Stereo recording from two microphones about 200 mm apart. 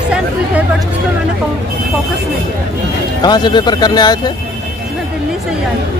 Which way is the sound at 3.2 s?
20° left (ahead or behind).